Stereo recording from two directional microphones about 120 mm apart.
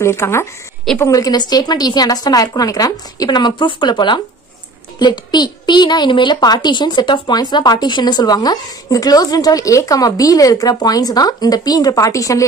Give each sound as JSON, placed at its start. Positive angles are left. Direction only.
{"t": 0.0, "sound": "a woman's voice", "side_deg": 20}